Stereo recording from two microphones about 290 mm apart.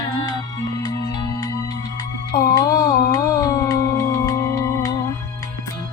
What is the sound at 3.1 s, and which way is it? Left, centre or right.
Music, centre.